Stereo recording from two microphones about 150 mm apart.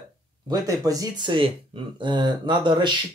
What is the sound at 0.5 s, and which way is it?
Speech, 25° right (ahead or behind).